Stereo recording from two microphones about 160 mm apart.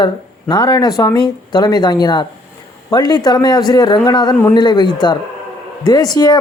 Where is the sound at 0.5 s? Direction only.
25° left (ahead or behind).